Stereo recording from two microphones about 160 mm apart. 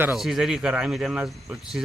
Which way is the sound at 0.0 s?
5° right (ahead or behind).